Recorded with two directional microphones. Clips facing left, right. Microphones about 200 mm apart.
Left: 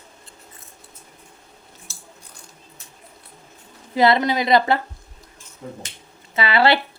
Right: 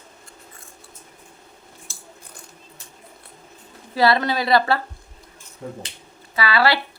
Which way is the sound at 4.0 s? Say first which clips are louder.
Left 2 dB; 20° left (ahead or behind).